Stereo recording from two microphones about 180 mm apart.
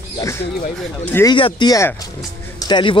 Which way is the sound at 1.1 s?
15° left (ahead or behind).